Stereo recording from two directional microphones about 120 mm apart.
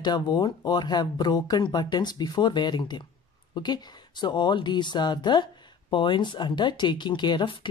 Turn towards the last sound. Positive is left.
turn(degrees=40)  # may be behind; listen again after turning